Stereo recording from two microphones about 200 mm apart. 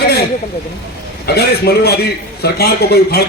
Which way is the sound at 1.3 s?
55° left (ahead or behind).